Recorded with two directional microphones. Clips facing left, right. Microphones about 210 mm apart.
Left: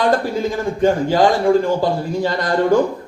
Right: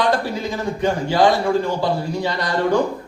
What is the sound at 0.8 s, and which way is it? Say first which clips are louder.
Speech: left 3 dB; 50° left (ahead or behind).